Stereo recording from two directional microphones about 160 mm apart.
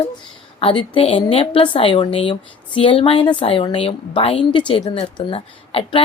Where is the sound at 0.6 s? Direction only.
30° left (ahead or behind).